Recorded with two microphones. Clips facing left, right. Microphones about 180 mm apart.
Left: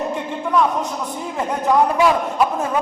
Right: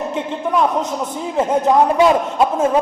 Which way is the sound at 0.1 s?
20° right (ahead or behind).